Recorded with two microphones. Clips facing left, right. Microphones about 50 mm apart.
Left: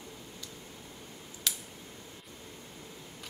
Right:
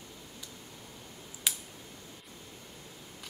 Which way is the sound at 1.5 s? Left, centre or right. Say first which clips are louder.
Right 1 dB; centre.